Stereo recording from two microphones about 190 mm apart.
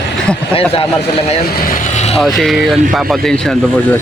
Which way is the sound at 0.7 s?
30° left (ahead or behind).